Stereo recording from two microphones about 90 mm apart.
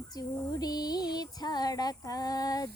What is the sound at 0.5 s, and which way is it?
Female singing, 45° left (ahead or behind).